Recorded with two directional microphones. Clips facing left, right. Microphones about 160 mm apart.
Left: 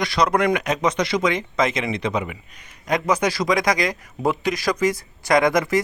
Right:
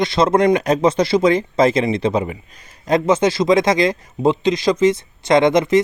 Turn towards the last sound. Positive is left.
turn(degrees=-20)  # may be behind; listen again after turning